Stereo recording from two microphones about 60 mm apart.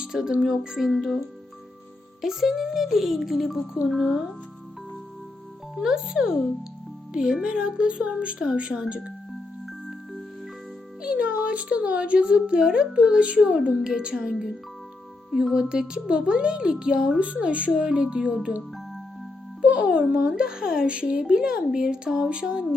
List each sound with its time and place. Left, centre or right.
0.0 s speech: centre
2.2 s speech: centre
5.7 s speech: centre
11.0 s speech: centre
15.5 s speech: centre
19.6 s speech: centre